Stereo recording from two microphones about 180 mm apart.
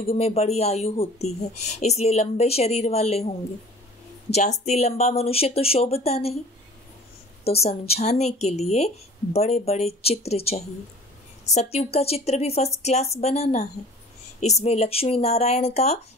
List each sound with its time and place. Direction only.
0.0 s speech: 35° left (ahead or behind)
7.4 s speech: 35° left (ahead or behind)